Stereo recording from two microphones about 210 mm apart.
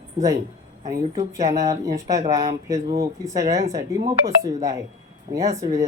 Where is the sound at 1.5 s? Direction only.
15° right (ahead or behind).